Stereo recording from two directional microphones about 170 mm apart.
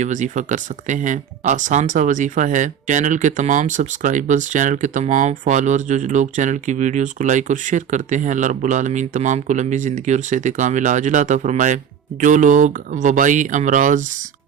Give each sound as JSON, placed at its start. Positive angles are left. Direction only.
{"t": 0.0, "sound": "speech", "side_deg": -45}